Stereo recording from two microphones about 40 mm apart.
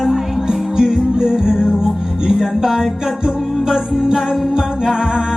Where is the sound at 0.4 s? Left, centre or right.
Centre.